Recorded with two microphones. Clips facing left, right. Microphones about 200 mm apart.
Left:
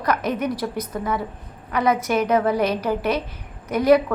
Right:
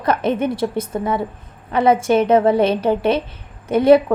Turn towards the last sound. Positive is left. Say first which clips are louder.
# right 5 dB
turn(degrees=-25)  # may be behind; listen again after turning